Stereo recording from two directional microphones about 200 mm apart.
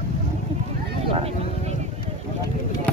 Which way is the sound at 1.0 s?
30° right (ahead or behind).